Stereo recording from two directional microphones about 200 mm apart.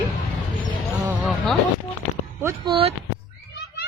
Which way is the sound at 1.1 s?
Centre (ahead or behind).